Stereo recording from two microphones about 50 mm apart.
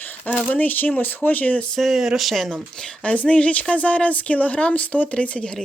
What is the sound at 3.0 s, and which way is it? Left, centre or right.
Speech, left.